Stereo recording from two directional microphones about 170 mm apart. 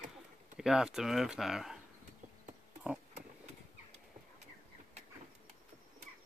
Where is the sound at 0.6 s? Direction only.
5° right (ahead or behind).